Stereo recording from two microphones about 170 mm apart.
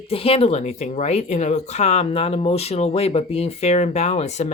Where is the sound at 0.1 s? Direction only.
35° left (ahead or behind).